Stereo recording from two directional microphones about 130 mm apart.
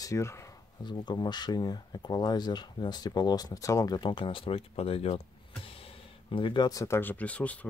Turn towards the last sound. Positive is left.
turn(degrees=10)  # may be behind; listen again after turning